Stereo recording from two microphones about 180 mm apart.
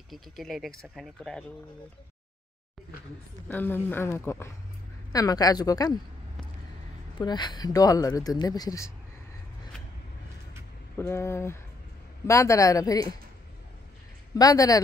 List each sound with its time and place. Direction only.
0.1 s speech: centre (ahead or behind)
3.4 s speech: 10° left (ahead or behind)
7.2 s speech: 25° left (ahead or behind)
11.0 s speech: 15° left (ahead or behind)
14.3 s speech: 20° left (ahead or behind)